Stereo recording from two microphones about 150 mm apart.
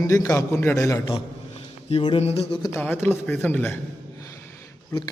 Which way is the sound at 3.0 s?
15° left (ahead or behind).